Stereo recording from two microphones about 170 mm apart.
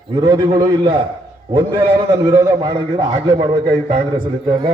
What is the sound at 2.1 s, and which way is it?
A man's voice, 20° right (ahead or behind).